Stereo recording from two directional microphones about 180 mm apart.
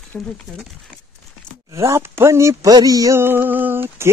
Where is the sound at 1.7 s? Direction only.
15° right (ahead or behind).